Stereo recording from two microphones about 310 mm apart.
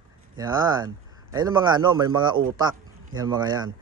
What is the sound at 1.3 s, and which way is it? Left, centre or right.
A man's voice, centre.